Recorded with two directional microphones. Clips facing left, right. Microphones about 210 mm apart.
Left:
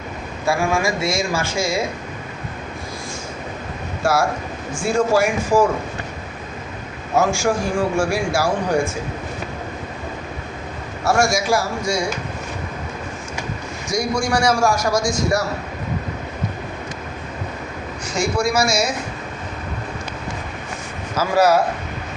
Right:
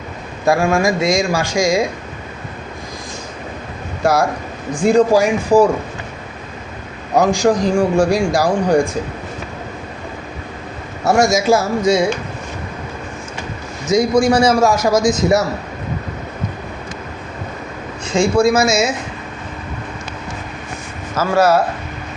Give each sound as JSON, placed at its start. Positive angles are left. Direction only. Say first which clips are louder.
{"t": 0.4, "sound": "a man's voice", "louder": "right 5 dB", "side_deg": -15}
{"t": 4.0, "sound": "a man's voice", "louder": "right 3 dB", "side_deg": -15}
{"t": 7.2, "sound": "a man's voice", "louder": "right 5 dB", "side_deg": -15}
{"t": 11.0, "sound": "a man's voice", "louder": "right 5 dB", "side_deg": -20}
{"t": 13.8, "sound": "a man's voice", "louder": "right 9 dB", "side_deg": -20}
{"t": 18.0, "sound": "a man's voice", "louder": "right 7 dB", "side_deg": -25}
{"t": 21.2, "sound": "speech", "louder": "right 2 dB", "side_deg": 10}